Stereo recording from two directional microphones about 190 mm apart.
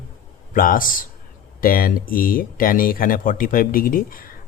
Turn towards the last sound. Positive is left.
turn(degrees=50)  # may be behind; listen again after turning